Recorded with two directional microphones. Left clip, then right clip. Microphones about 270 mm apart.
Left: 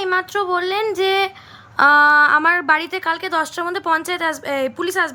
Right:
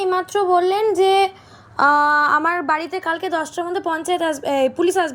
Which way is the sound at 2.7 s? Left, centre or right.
Centre.